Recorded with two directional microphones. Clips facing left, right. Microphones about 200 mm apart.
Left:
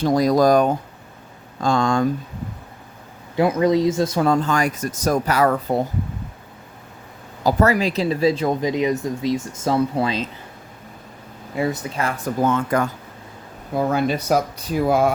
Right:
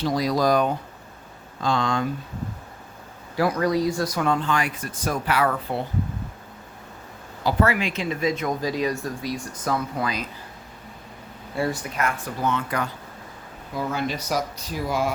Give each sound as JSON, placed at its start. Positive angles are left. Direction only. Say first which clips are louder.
{"t": 0.0, "sound": "speech", "louder": "left 6 dB", "side_deg": 45}
{"t": 3.3, "sound": "speech", "louder": "left 5 dB", "side_deg": 20}
{"t": 4.3, "sound": "speech", "louder": "left 5 dB", "side_deg": 40}
{"t": 7.4, "sound": "speech", "louder": "left 4 dB", "side_deg": 40}
{"t": 11.5, "sound": "speech", "louder": "left 3 dB", "side_deg": 20}
{"t": 12.2, "sound": "speech", "louder": "left 6 dB", "side_deg": 50}